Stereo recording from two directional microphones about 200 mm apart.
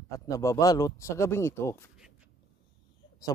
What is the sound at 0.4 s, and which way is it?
Speech, 15° left (ahead or behind).